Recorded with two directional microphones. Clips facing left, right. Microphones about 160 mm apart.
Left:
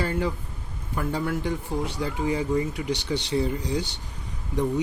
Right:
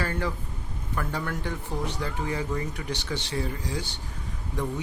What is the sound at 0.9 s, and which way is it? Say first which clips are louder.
Speech: left 4 dB; 10° left (ahead or behind).